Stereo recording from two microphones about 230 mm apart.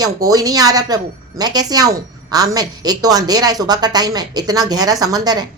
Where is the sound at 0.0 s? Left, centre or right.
Centre.